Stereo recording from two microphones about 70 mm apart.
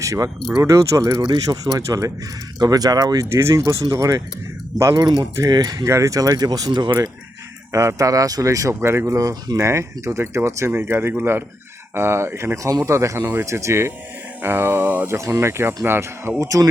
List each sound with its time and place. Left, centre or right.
0.0 s speech: right
3.3 s speech: right
4.9 s speech: right
5.4 s speech: right
5.9 s speech: right
7.7 s speech: right
8.7 s speech: right
9.0 s speech: right
12.6 s speech: right
14.4 s speech: right
15.0 s speech: right
16.4 s speech: right